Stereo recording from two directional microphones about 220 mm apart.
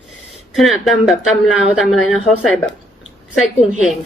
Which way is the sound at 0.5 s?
Centre (ahead or behind).